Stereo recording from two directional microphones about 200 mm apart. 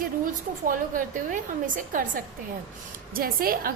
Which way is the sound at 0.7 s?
40° right (ahead or behind).